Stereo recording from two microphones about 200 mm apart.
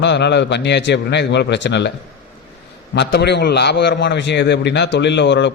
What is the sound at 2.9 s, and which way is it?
A man's voice, 55° left (ahead or behind).